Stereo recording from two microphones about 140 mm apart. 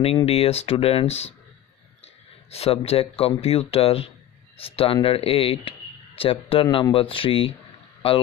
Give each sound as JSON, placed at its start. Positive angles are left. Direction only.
{"t": 0.0, "sound": "speech", "side_deg": 45}
{"t": 2.5, "sound": "speech", "side_deg": 45}